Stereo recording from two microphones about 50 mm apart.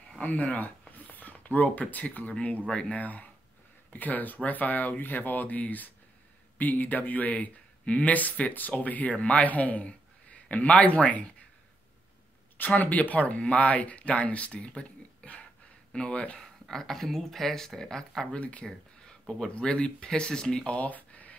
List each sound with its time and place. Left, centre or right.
0.2 s speech: left
2.6 s speech: centre
3.0 s speech: left
12.5 s speech: left
15.9 s speech: centre
16.3 s speech: centre
18.4 s speech: left
18.7 s a sound: centre
19.5 s speech: centre
20.7 s speech: left